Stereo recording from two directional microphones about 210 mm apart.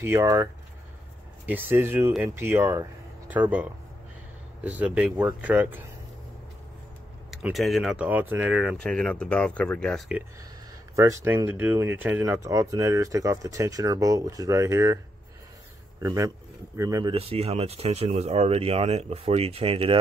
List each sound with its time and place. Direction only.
0.0 s speech: 10° right (ahead or behind)
7.2 s speech: centre (ahead or behind)
11.0 s speech: 15° right (ahead or behind)
16.0 s speech: 15° right (ahead or behind)
17.1 s speech: 30° right (ahead or behind)